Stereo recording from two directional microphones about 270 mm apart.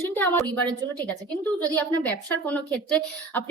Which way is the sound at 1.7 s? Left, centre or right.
Centre.